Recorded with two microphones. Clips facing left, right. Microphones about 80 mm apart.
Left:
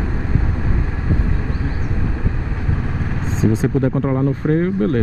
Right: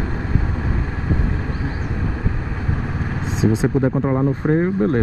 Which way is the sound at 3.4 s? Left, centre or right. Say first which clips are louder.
Even; centre.